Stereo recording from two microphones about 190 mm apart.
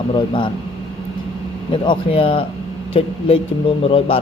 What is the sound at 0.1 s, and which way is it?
Speech, 25° left (ahead or behind).